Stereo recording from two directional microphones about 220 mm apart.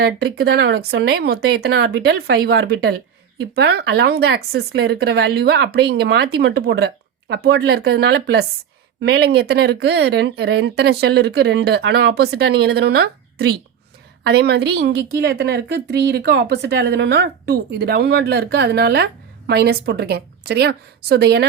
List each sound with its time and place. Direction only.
0.0 s a woman's voice: 45° right (ahead or behind)